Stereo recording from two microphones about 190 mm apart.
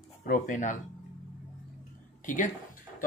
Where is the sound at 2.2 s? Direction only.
45° left (ahead or behind).